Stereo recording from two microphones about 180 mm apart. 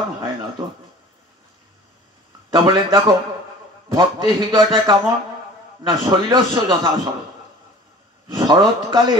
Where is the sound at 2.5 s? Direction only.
25° right (ahead or behind).